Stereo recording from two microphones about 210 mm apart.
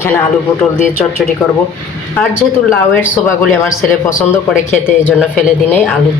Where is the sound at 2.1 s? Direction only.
5° left (ahead or behind).